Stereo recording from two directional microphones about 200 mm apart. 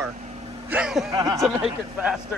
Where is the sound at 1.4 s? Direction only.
Centre (ahead or behind).